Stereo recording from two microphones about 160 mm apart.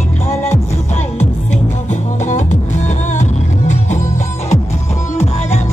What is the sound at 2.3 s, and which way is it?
Music, 50° left (ahead or behind).